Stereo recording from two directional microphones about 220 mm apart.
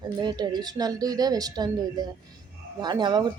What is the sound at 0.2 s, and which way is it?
A woman's voice, 20° right (ahead or behind).